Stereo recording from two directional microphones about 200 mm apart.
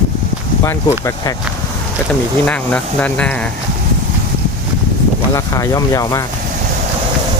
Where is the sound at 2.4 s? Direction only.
5° left (ahead or behind).